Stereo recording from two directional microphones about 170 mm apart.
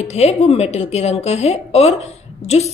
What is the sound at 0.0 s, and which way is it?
A woman's voice, 40° left (ahead or behind).